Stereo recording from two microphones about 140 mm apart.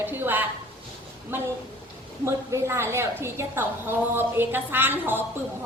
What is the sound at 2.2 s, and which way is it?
A woman's voice, 20° right (ahead or behind).